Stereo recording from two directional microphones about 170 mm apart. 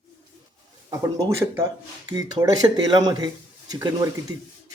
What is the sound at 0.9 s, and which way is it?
Speech, 20° right (ahead or behind).